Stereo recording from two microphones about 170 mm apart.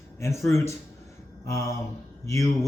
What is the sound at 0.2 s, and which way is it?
Speech, 15° left (ahead or behind).